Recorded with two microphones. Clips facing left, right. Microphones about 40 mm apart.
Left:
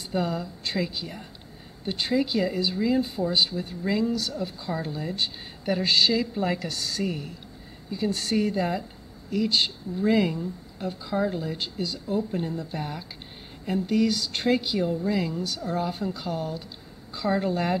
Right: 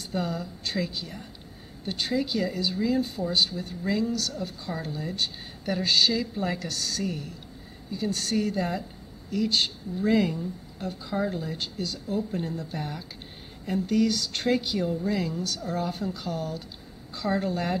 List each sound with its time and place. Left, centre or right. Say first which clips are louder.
0.0 s a woman's voice: left 3 dB; centre